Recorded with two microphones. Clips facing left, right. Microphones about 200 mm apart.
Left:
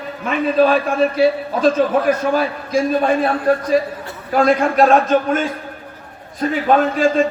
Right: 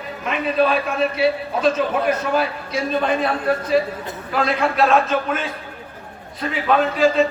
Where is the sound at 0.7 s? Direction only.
45° left (ahead or behind).